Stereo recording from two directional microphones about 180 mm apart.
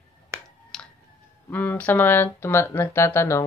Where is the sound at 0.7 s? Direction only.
Centre (ahead or behind).